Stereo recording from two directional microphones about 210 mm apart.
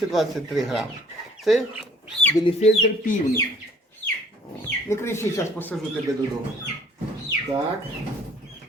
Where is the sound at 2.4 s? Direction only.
30° left (ahead or behind).